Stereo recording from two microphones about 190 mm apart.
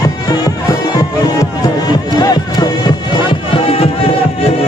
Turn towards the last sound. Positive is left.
turn(degrees=30)  # may be behind; listen again after turning